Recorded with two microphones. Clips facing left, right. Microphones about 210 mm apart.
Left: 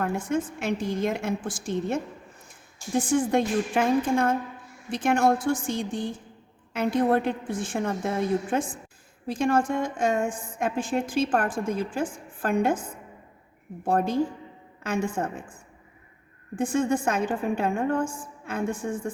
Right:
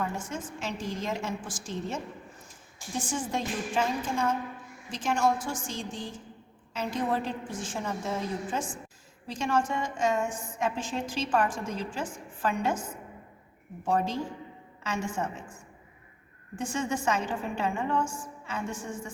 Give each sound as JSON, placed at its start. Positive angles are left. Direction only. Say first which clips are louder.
{"t": 0.0, "sound": "a woman's voice", "louder": "left 7 dB", "side_deg": 55}
{"t": 16.6, "sound": "a woman's voice", "louder": "left 7 dB", "side_deg": 55}